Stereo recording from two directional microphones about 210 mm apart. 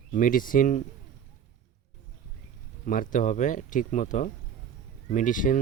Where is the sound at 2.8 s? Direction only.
40° left (ahead or behind).